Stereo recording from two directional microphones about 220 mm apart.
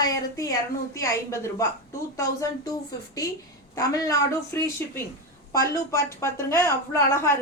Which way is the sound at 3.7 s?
15° left (ahead or behind).